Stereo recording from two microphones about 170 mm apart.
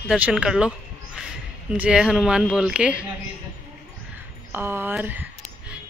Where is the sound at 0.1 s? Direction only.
5° right (ahead or behind).